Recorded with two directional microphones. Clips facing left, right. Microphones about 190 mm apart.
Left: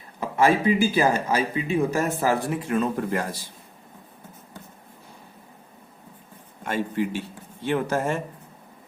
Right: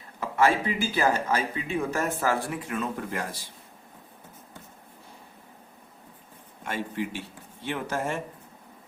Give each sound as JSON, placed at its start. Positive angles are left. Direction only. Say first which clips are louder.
{"t": 0.2, "sound": "speech", "louder": "left 3 dB", "side_deg": 15}
{"t": 2.5, "sound": "speech", "louder": "left 7 dB", "side_deg": 30}
{"t": 6.7, "sound": "speech", "louder": "left 5 dB", "side_deg": 40}